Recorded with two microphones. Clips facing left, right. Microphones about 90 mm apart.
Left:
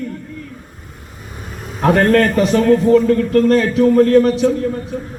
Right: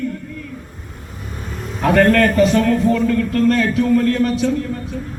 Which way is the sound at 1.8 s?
30° left (ahead or behind).